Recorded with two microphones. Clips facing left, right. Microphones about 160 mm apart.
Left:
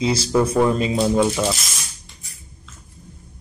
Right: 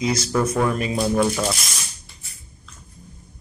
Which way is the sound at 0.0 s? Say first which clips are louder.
Left 3 dB; 30° left (ahead or behind).